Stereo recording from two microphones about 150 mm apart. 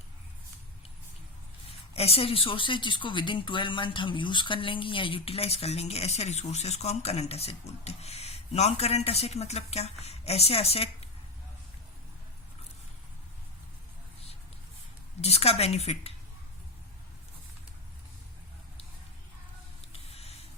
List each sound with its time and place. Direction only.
1.9 s speech: 40° left (ahead or behind)
15.2 s speech: 45° left (ahead or behind)
19.9 s spray: 40° left (ahead or behind)